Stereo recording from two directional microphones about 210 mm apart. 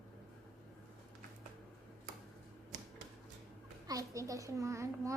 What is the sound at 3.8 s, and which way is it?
A child's voice, 15° right (ahead or behind).